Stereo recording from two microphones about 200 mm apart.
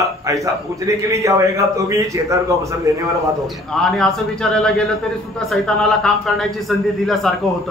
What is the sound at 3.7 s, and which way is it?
A man's voice, centre (ahead or behind).